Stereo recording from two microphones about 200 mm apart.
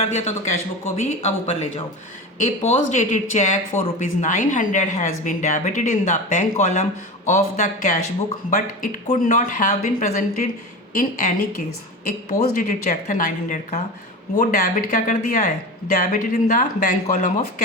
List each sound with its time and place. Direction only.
0.0 s speech: 35° left (ahead or behind)